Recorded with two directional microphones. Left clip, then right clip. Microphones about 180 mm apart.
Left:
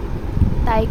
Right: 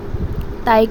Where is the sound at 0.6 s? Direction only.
30° right (ahead or behind).